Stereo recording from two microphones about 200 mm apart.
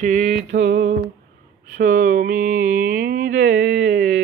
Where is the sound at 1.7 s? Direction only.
40° right (ahead or behind).